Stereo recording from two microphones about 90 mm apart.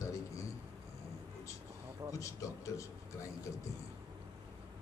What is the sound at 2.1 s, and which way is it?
A man's voice, 35° left (ahead or behind).